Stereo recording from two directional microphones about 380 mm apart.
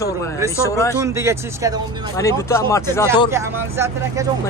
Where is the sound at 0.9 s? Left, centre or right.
Centre.